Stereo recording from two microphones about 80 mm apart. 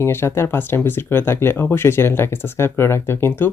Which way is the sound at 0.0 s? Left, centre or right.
Left.